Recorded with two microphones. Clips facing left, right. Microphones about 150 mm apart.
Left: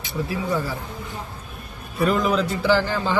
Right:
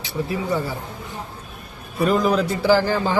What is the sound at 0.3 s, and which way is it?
Speech, 25° right (ahead or behind).